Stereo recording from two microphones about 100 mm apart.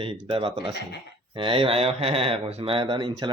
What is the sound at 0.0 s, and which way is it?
Speech, 65° right (ahead or behind).